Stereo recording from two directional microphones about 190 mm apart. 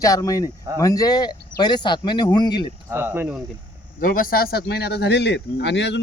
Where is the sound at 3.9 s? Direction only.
50° left (ahead or behind); by 6.0 s 65° left (ahead or behind).